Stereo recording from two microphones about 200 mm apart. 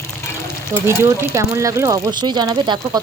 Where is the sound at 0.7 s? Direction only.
10° right (ahead or behind).